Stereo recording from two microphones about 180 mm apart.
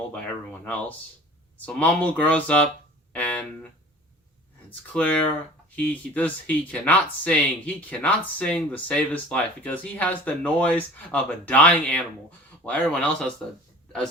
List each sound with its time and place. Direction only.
0.6 s speech: 10° left (ahead or behind)
3.1 s a sound: 10° left (ahead or behind)
4.9 s speech: 10° left (ahead or behind)